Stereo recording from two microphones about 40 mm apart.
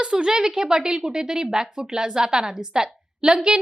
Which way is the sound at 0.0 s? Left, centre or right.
Right.